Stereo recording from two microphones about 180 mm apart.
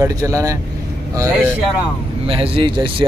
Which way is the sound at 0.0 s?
20° right (ahead or behind).